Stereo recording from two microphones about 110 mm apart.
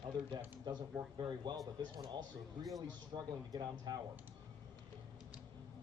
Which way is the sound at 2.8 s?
35° right (ahead or behind).